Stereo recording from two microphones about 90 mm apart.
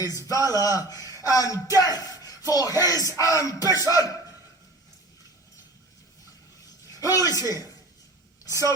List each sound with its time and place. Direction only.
0.0 s speech: 40° left (ahead or behind)
6.8 s a man's voice: 40° left (ahead or behind)